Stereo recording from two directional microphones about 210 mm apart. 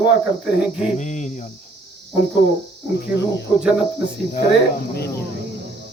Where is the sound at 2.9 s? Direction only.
55° left (ahead or behind).